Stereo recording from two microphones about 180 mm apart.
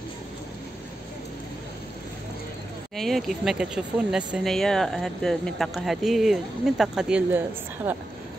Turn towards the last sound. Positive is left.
turn(degrees=-10)  # may be behind; listen again after turning